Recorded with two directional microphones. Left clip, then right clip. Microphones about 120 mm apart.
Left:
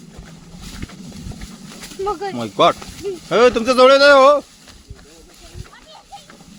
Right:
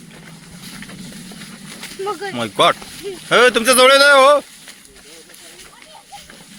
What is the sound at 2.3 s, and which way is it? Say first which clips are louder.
Speech: right 1 dB; 15° left (ahead or behind).